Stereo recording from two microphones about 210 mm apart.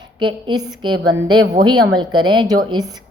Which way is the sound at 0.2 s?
20° right (ahead or behind).